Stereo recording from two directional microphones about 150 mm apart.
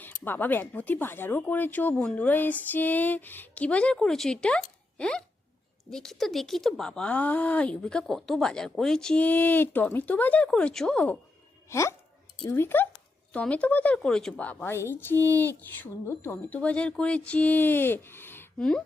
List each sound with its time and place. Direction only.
0.0 s speech: 15° left (ahead or behind)
11.7 s speech: 20° left (ahead or behind)